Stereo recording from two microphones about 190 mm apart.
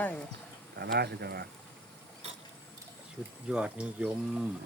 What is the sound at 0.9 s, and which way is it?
Speech, 60° right (ahead or behind).